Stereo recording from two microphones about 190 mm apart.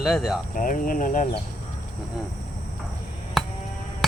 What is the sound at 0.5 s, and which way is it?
Speech, 45° left (ahead or behind).